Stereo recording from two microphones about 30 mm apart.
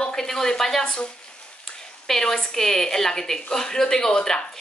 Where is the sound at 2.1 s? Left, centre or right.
Centre.